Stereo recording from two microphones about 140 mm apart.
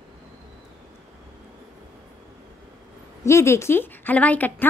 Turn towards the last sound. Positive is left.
turn(degrees=10)  # may be behind; listen again after turning